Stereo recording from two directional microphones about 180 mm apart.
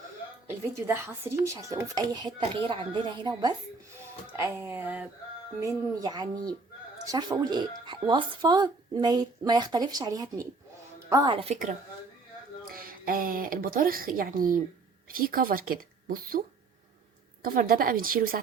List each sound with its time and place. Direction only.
0.4 s speech: 15° right (ahead or behind)
4.4 s speech: 15° right (ahead or behind)
5.6 s speech: 20° right (ahead or behind); by 11.7 s 40° right (ahead or behind)
12.7 s a woman's voice: 55° right (ahead or behind)
17.4 s a woman's voice: 55° right (ahead or behind)